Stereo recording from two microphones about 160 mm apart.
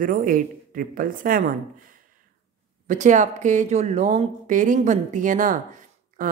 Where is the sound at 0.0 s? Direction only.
60° right (ahead or behind).